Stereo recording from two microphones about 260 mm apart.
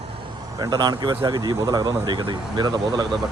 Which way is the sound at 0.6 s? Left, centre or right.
Centre.